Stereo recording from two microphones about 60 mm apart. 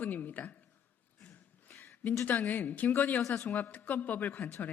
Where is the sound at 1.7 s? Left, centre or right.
Left.